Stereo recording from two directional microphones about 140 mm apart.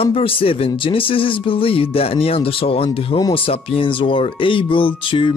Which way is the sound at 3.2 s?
30° left (ahead or behind).